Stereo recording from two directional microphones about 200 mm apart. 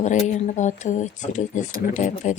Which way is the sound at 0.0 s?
35° left (ahead or behind).